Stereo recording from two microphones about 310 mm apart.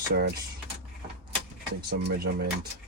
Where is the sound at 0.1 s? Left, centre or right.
Right.